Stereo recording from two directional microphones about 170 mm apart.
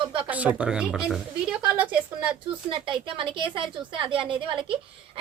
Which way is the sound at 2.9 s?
30° right (ahead or behind).